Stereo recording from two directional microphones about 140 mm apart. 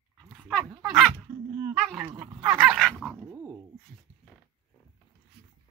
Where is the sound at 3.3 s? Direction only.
20° right (ahead or behind).